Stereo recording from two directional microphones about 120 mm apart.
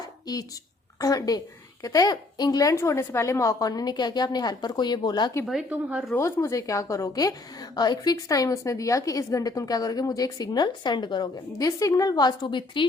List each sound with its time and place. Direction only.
0.0 s a sound: 30° left (ahead or behind)
0.9 s a woman's voice: 30° left (ahead or behind)
5.7 s speech: 10° right (ahead or behind)
6.1 s a woman's voice: 25° left (ahead or behind); by 12.9 s 40° left (ahead or behind)